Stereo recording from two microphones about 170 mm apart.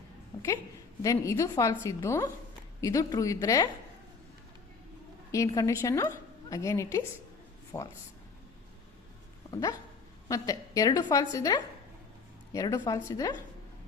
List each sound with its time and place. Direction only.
0.3 s a sound: 20° left (ahead or behind)
1.0 s a woman's voice: 20° left (ahead or behind)
5.3 s a woman's voice: 20° left (ahead or behind)
9.5 s dog: 20° left (ahead or behind)
10.2 s a woman's voice: 20° left (ahead or behind)